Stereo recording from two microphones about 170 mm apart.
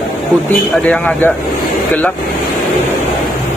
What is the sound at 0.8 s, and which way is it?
Speech, 10° left (ahead or behind).